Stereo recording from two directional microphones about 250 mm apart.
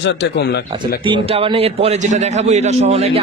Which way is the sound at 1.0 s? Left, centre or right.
Right.